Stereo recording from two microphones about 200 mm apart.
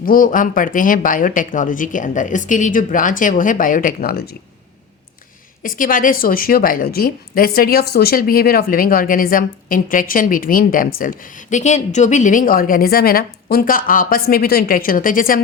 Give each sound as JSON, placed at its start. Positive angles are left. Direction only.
{"t": 0.0, "sound": "speech", "side_deg": 45}
{"t": 5.6, "sound": "a woman's voice", "side_deg": 45}